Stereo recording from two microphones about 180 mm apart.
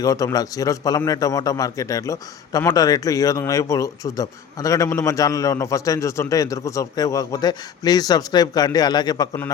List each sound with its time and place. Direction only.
0.0 s a man's voice: 20° left (ahead or behind)